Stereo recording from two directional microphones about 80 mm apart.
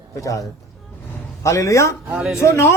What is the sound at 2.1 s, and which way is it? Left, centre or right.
Speech, centre.